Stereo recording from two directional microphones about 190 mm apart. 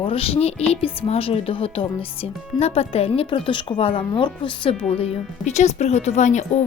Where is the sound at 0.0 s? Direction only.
30° left (ahead or behind).